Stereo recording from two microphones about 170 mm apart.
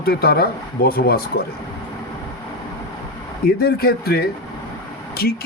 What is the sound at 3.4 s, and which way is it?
Speech, 65° left (ahead or behind).